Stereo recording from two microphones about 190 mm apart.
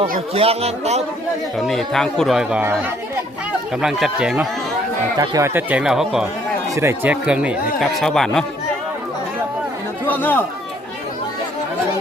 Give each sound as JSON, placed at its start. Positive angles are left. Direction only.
{"t": 0.3, "sound": "speech", "side_deg": -30}
{"t": 1.5, "sound": "speech", "side_deg": 0}
{"t": 3.8, "sound": "speech", "side_deg": -5}
{"t": 5.1, "sound": "speech", "side_deg": -20}
{"t": 10.1, "sound": "speech", "side_deg": 10}